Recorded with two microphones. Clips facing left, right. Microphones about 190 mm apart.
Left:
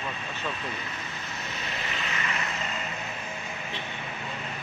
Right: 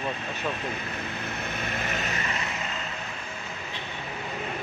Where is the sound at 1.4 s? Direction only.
55° right (ahead or behind).